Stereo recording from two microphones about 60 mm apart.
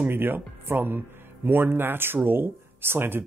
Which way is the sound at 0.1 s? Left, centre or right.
Right.